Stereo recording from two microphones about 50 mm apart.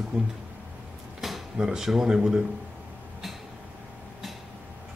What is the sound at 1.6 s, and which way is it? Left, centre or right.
Speech, centre.